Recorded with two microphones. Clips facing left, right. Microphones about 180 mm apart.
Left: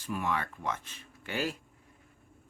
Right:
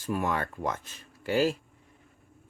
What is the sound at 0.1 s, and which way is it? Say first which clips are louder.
Speech: right 4 dB; 45° right (ahead or behind).